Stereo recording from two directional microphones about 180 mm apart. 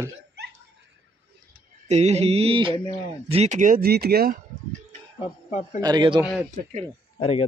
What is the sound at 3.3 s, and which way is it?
Speech, 40° right (ahead or behind).